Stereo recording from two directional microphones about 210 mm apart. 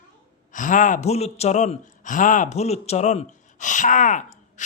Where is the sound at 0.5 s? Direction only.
40° left (ahead or behind).